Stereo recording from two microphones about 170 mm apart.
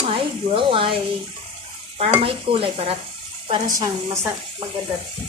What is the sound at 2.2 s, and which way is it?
Stir, 35° right (ahead or behind).